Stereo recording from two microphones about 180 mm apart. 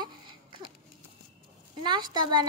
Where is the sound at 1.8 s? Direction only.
25° right (ahead or behind).